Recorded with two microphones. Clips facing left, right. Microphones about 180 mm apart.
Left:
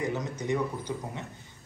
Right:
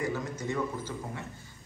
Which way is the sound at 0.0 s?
20° left (ahead or behind).